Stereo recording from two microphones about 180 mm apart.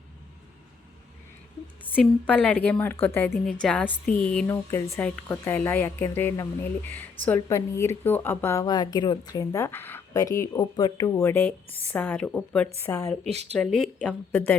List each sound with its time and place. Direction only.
2.0 s a woman's voice: 5° left (ahead or behind); by 11.1 s 25° left (ahead or behind)
11.2 s speech: 10° left (ahead or behind)
13.2 s speech: 35° right (ahead or behind)
13.6 s a woman's voice: 5° left (ahead or behind)